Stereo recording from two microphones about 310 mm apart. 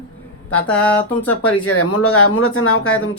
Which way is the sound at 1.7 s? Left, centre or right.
Left.